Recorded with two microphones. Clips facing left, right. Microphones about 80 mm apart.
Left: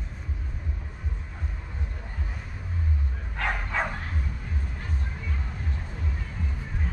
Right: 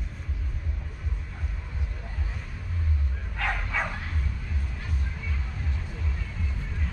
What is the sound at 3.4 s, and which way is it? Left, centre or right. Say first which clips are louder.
Dog: left 1 dB; centre.